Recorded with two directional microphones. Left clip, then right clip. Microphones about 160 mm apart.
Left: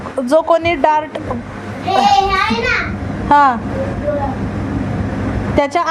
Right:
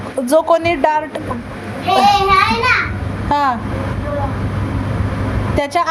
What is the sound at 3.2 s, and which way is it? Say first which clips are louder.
Speech: left 5 dB; 15° left (ahead or behind).